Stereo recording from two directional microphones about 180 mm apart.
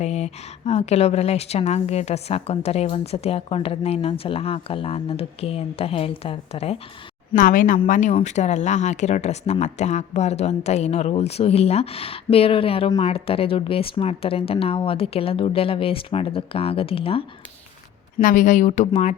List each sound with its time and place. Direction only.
0.0 s a woman's voice: 35° left (ahead or behind)
7.3 s a woman's voice: 50° left (ahead or behind); by 17.2 s 30° left (ahead or behind)
18.2 s speech: 45° left (ahead or behind)